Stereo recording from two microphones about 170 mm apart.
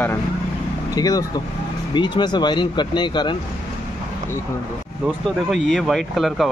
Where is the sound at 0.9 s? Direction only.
20° left (ahead or behind).